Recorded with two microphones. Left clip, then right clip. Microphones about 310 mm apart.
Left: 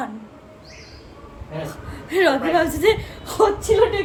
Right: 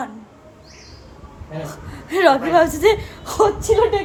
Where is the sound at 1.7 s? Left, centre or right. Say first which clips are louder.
Right 1 dB; centre.